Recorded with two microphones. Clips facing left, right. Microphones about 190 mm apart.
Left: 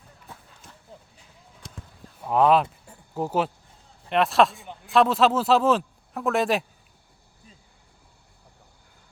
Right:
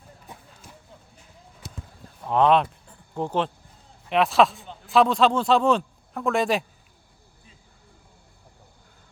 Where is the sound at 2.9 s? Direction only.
5° left (ahead or behind).